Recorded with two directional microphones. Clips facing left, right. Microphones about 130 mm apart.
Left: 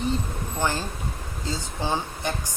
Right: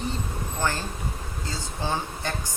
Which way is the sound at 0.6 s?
15° left (ahead or behind).